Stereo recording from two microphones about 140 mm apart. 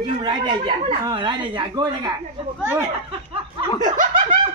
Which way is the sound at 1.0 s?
30° right (ahead or behind).